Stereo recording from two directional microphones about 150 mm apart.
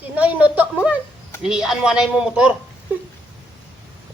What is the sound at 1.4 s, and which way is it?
Speech, 5° right (ahead or behind).